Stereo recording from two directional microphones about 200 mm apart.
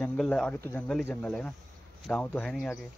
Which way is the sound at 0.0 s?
5° left (ahead or behind).